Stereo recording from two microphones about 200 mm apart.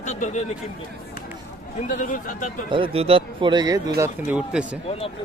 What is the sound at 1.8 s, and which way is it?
Speech, 40° left (ahead or behind).